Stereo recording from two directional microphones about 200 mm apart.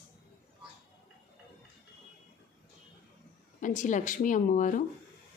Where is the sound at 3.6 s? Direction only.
40° left (ahead or behind).